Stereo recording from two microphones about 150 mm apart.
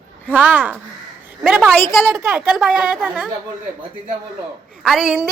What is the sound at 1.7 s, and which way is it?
Speech, 15° left (ahead or behind).